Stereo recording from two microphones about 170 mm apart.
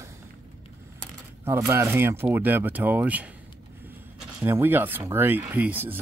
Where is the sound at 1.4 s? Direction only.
15° right (ahead or behind).